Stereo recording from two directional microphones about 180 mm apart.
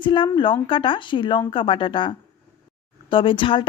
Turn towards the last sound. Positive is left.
turn(degrees=30)  # may be behind; listen again after turning